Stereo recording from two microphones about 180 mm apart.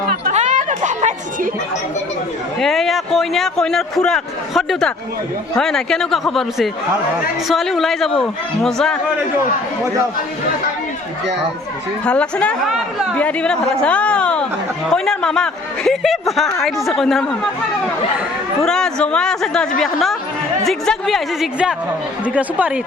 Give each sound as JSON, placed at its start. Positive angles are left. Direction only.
{"t": 0.3, "sound": "a sound", "side_deg": -40}
{"t": 2.6, "sound": "a man's voice", "side_deg": 0}
{"t": 12.0, "sound": "a man's voice", "side_deg": 5}
{"t": 18.6, "sound": "a man's voice", "side_deg": 5}